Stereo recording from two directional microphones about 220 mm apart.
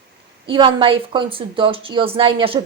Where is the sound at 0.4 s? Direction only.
25° right (ahead or behind).